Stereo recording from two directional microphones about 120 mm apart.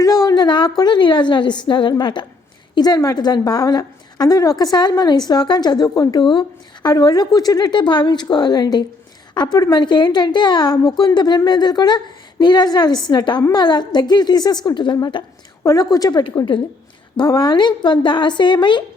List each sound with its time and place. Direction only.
0.0 s a woman's voice: 30° left (ahead or behind)